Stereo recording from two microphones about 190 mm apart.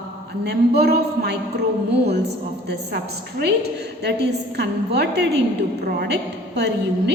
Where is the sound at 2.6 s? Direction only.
55° right (ahead or behind).